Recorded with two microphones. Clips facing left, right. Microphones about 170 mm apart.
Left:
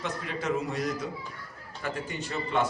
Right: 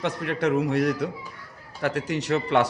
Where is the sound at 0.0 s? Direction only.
65° right (ahead or behind).